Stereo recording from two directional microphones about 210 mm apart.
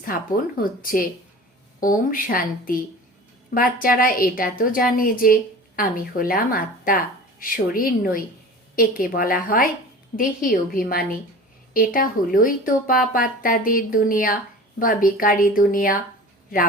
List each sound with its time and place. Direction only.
0.6 s a woman's voice: 40° left (ahead or behind)